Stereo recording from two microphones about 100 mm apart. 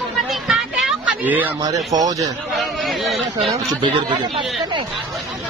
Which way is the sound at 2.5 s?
Centre (ahead or behind).